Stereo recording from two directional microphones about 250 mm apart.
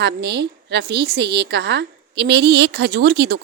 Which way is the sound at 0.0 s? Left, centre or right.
Right.